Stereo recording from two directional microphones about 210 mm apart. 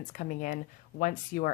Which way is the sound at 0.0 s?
40° left (ahead or behind).